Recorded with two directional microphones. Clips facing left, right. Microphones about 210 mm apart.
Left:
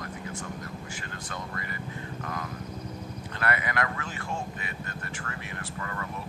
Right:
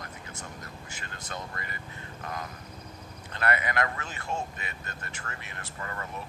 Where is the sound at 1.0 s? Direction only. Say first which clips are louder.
Left 1 dB; 20° right (ahead or behind).